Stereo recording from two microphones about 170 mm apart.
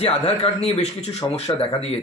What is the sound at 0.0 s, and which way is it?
Speech, 35° left (ahead or behind).